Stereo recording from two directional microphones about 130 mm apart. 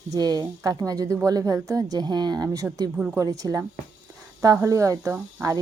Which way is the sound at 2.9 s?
10° right (ahead or behind).